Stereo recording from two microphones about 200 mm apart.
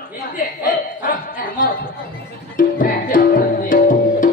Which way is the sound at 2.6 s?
45° left (ahead or behind).